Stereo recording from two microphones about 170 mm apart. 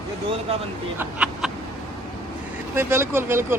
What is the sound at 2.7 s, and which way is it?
Speech, 10° right (ahead or behind).